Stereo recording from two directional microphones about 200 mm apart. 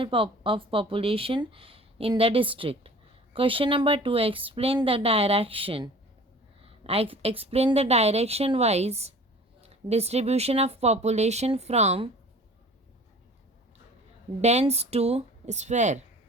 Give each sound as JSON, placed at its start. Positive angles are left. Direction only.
{"t": 0.0, "sound": "a woman's voice", "side_deg": -25}
{"t": 14.4, "sound": "a woman's voice", "side_deg": -35}